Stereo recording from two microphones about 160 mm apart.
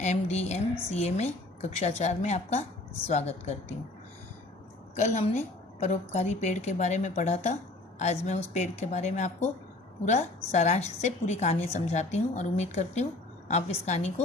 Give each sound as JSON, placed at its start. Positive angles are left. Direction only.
{"t": 0.0, "sound": "speech", "side_deg": 45}
{"t": 4.9, "sound": "speech", "side_deg": 45}